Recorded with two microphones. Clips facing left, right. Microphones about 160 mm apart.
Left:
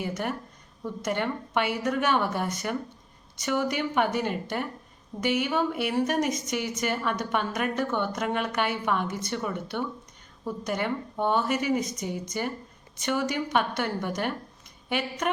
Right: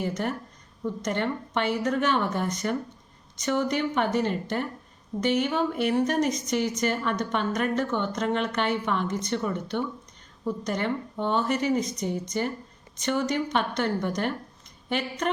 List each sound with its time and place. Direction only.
0.0 s a woman's voice: 5° left (ahead or behind)